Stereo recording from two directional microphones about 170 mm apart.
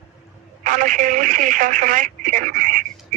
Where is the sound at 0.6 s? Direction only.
50° right (ahead or behind).